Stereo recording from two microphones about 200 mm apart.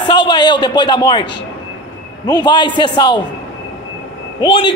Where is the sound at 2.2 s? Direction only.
20° left (ahead or behind).